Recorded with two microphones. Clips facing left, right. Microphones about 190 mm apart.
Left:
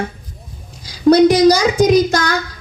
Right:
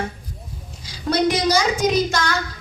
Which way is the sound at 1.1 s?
40° left (ahead or behind).